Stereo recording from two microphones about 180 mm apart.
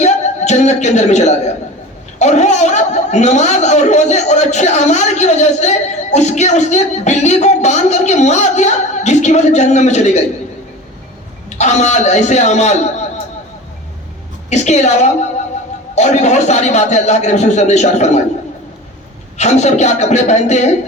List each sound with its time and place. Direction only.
0.0 s a sound: 40° left (ahead or behind)
2.1 s a man's voice: 40° left (ahead or behind)
11.4 s a man's voice: 40° left (ahead or behind)
14.5 s a man's voice: 40° left (ahead or behind)
19.4 s a man's voice: 40° left (ahead or behind)